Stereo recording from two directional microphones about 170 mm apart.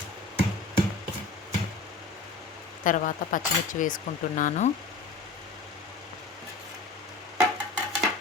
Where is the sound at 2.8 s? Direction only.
50° left (ahead or behind).